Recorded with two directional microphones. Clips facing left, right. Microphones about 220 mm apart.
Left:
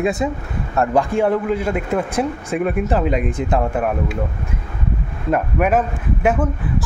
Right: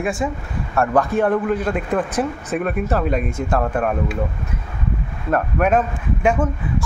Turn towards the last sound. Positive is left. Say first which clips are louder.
# left 1 dB
turn(degrees=5)  # may be behind; listen again after turning